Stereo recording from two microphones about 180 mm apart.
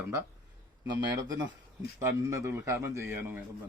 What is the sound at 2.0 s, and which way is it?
Speech, 15° right (ahead or behind).